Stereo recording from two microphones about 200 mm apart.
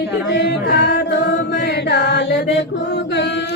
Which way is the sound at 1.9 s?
55° left (ahead or behind).